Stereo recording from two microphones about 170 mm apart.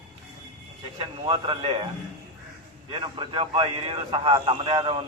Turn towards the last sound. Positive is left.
turn(degrees=-30)  # may be behind; listen again after turning